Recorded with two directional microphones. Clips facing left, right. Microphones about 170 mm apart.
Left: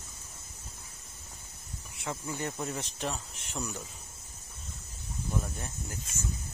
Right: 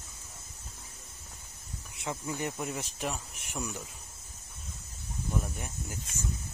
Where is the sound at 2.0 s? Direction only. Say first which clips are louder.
Right 1 dB; 20° right (ahead or behind).